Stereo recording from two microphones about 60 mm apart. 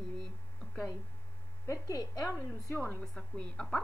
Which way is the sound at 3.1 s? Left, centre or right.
Centre.